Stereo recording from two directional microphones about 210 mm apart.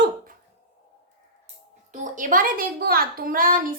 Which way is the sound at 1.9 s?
35° right (ahead or behind).